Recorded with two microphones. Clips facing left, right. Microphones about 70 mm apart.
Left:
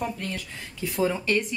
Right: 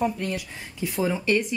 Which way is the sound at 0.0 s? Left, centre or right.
Centre.